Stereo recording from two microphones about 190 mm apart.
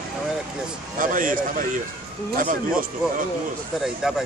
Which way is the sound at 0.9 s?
45° right (ahead or behind).